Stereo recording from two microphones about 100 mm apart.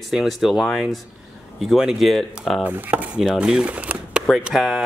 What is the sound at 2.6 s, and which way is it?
Speech, 15° right (ahead or behind).